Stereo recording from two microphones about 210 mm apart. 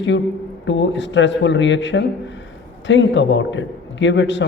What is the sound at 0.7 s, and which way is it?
A man's voice, 60° left (ahead or behind).